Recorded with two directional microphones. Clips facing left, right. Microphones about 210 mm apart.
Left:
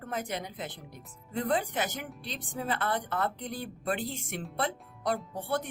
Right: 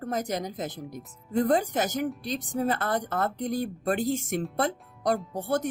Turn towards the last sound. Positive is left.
turn(degrees=-45)  # may be behind; listen again after turning